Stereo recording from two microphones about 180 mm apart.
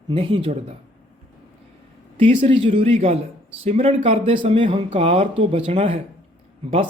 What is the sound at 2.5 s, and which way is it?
Speech, 30° right (ahead or behind).